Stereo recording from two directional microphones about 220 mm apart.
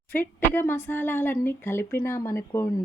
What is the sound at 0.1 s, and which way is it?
A woman's voice, 10° left (ahead or behind).